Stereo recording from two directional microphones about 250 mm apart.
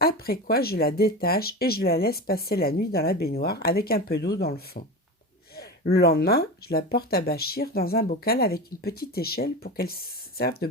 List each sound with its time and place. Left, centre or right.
0.0 s speech: left